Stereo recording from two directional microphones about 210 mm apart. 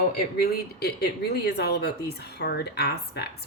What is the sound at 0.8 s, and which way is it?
A woman's voice, 50° left (ahead or behind).